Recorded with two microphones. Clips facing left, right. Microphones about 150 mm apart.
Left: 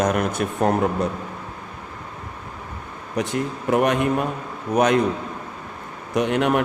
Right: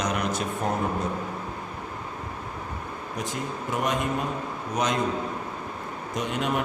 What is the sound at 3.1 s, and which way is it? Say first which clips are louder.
Speech: left 8 dB; 65° left (ahead or behind).